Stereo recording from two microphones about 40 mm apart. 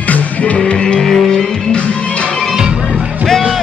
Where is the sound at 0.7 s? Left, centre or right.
Left.